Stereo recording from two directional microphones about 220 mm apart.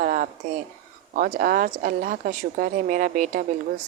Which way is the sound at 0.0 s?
40° right (ahead or behind).